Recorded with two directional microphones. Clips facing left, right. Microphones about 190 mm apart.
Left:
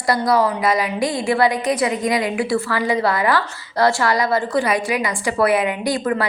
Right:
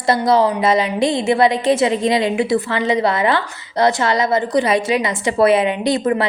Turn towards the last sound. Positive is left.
turn(degrees=-20)  # may be behind; listen again after turning